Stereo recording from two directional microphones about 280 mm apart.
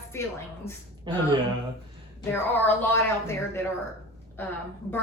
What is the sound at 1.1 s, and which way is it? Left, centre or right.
Speech, centre.